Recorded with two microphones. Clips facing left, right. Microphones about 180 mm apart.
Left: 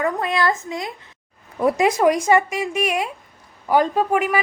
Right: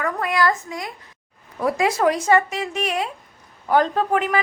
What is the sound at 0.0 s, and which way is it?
A woman's voice, 25° left (ahead or behind).